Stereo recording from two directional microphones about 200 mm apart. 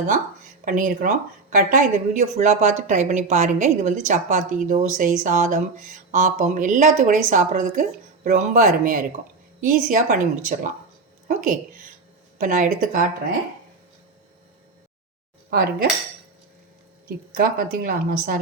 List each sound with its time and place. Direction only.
0.6 s a woman's voice: 40° right (ahead or behind)
11.3 s a woman's voice: 45° right (ahead or behind)
15.4 s dishes: 45° right (ahead or behind)
17.3 s a woman's voice: 45° right (ahead or behind)